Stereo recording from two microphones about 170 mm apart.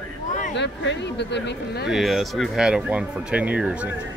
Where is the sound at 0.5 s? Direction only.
90° left.